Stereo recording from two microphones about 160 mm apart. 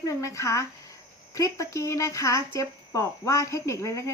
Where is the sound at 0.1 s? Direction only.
20° left (ahead or behind).